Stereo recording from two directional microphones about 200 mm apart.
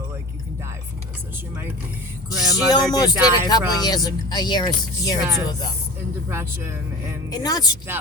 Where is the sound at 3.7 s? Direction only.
20° left (ahead or behind).